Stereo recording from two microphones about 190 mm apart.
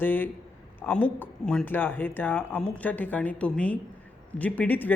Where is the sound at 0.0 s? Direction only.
10° left (ahead or behind).